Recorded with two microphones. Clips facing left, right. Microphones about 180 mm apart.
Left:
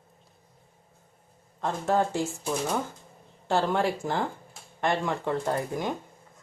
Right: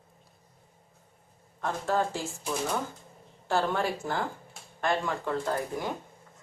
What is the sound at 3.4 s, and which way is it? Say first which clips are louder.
Speech: left 3 dB; 20° left (ahead or behind).